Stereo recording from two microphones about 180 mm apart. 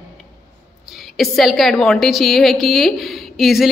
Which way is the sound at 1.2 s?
Centre (ahead or behind).